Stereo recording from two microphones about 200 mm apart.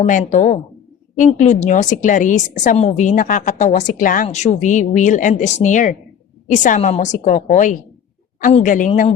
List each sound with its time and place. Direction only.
0.1 s a woman's voice: 40° left (ahead or behind)